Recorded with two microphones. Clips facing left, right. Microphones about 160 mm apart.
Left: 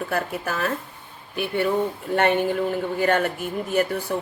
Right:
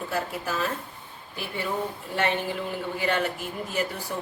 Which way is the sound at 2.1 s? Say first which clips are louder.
Left 7 dB; 55° left (ahead or behind).